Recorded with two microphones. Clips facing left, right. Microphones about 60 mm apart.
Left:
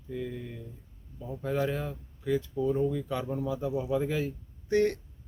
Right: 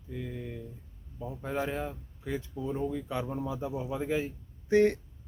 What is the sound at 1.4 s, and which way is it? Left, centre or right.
Speech, right.